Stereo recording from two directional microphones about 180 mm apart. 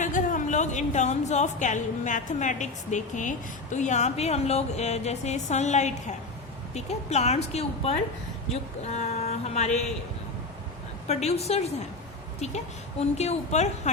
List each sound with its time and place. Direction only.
0.0 s a woman's voice: 45° left (ahead or behind)
8.9 s a sound: 40° left (ahead or behind)
11.1 s a woman's voice: 35° left (ahead or behind)
13.1 s a woman's voice: 40° left (ahead or behind)